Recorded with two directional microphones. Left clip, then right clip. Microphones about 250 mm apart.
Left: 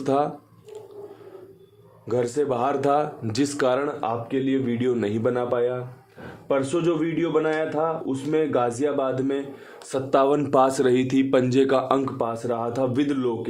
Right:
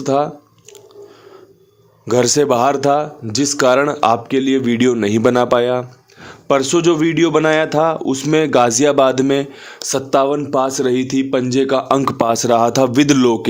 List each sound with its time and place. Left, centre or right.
0.0 s speech: centre
2.0 s a man's voice: right
5.2 s a man's voice: right